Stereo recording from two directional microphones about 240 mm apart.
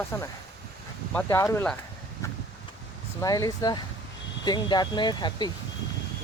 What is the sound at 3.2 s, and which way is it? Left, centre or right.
Speech, centre.